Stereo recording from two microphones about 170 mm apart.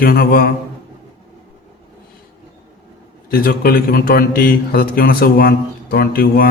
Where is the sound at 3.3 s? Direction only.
60° left (ahead or behind).